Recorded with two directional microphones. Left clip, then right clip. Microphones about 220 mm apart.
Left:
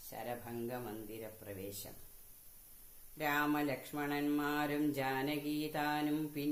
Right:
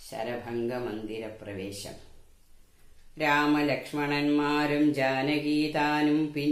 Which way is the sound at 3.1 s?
45° left (ahead or behind).